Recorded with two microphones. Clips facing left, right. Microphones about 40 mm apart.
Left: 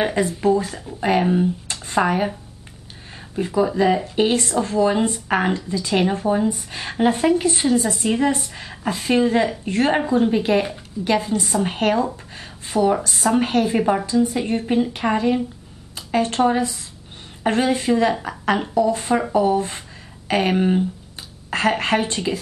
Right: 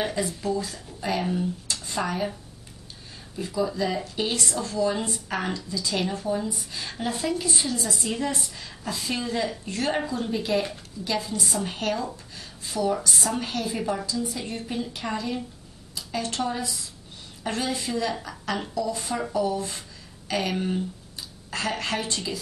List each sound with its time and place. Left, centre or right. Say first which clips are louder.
0.0 s a woman's voice: left 8 dB; left
3.3 s a woman's voice: left 8 dB; left